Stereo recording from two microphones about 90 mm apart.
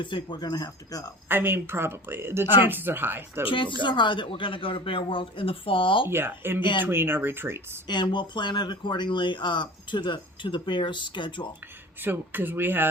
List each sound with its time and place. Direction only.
0.0 s speech: 60° left (ahead or behind); by 1.1 s 40° left (ahead or behind)
1.3 s speech: 25° right (ahead or behind)
3.4 s speech: 70° left (ahead or behind)
3.8 s speech: 60° left (ahead or behind)
6.1 s speech: 25° right (ahead or behind)
6.6 s speech: 60° left (ahead or behind)
6.8 s speech: 25° right (ahead or behind)
7.9 s speech: 55° left (ahead or behind)
12.0 s speech: 20° right (ahead or behind)